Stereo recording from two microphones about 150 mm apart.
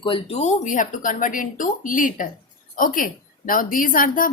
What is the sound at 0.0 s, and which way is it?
A woman's voice, 40° left (ahead or behind).